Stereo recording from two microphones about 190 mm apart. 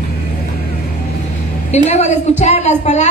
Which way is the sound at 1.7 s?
35° left (ahead or behind).